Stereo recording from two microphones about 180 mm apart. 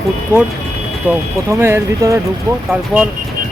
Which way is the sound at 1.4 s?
15° right (ahead or behind).